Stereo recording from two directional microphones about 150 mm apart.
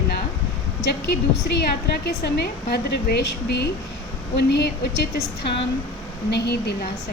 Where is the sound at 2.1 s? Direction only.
90° left.